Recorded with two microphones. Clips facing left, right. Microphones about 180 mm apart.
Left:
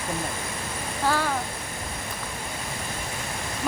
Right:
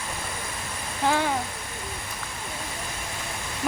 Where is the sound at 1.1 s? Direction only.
20° right (ahead or behind).